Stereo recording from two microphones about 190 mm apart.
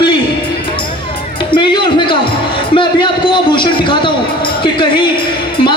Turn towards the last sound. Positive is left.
turn(degrees=25)  # may be behind; listen again after turning